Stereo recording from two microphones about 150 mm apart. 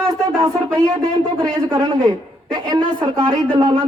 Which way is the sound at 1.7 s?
25° right (ahead or behind).